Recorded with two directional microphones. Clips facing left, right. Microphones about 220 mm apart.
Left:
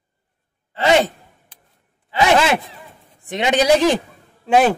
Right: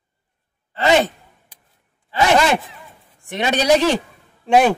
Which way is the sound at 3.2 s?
15° left (ahead or behind).